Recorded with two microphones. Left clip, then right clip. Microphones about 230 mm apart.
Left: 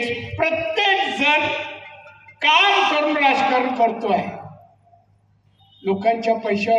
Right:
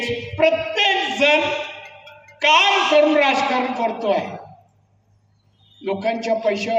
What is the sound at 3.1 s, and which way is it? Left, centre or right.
A man's voice, right.